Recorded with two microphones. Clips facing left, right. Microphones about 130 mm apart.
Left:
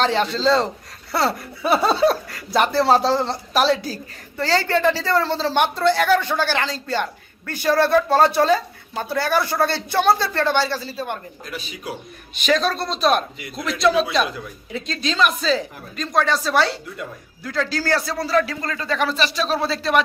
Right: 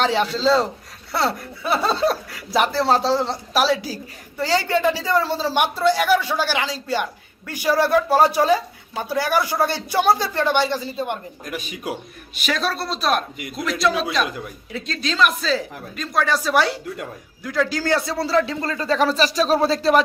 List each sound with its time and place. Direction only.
0.0 s speech: 5° right (ahead or behind)
11.4 s speech: 45° right (ahead or behind)
12.3 s speech: 5° right (ahead or behind); by 18.8 s 25° right (ahead or behind)
18.8 s speech: 35° right (ahead or behind)